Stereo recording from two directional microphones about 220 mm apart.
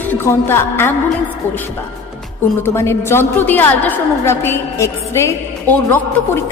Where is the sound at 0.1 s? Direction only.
10° left (ahead or behind).